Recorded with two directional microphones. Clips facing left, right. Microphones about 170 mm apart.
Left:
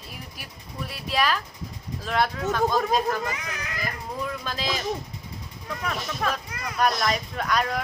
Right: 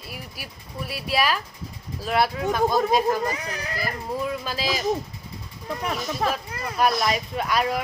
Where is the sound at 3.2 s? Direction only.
35° right (ahead or behind).